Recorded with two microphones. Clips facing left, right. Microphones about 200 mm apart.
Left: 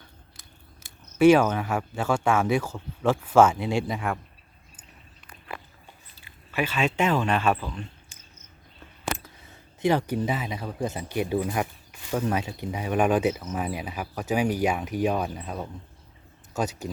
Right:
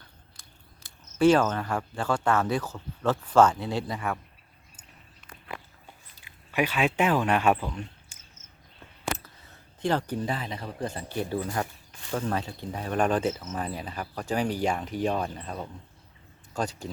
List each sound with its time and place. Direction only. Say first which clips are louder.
1.2 s speech: left 3 dB; 10° left (ahead or behind)
5.5 s biting: left 1 dB; 20° right (ahead or behind)
6.1 s speech: right 1 dB; 15° right (ahead or behind)
9.2 s speech: left 3 dB; 10° left (ahead or behind)